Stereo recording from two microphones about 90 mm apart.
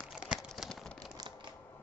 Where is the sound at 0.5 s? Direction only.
5° left (ahead or behind).